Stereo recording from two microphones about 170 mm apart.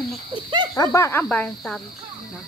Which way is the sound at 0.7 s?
15° left (ahead or behind).